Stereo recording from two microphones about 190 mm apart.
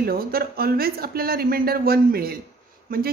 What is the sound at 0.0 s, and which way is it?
A man's voice, 50° right (ahead or behind).